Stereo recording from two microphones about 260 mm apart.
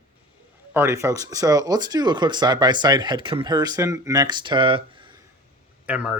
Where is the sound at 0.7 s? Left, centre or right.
Centre.